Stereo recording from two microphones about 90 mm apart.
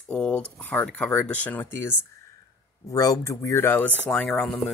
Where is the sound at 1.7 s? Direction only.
30° left (ahead or behind).